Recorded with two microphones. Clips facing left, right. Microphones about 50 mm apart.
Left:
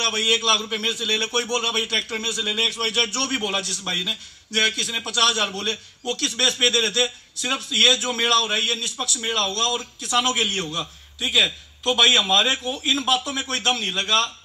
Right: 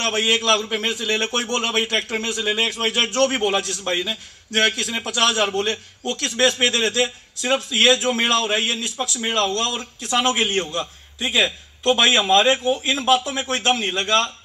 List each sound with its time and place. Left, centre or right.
0.0 s a man's voice: right; by 5.7 s centre
5.7 s a man's voice: right